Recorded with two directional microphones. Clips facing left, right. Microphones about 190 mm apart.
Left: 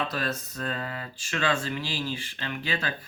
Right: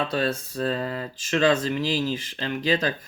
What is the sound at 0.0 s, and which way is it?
Speech, 30° right (ahead or behind).